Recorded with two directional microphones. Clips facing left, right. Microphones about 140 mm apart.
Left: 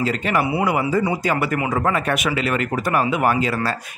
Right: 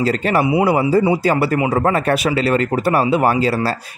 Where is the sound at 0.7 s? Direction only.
30° right (ahead or behind).